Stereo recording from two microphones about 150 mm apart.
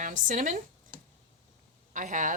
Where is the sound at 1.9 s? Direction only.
60° right (ahead or behind).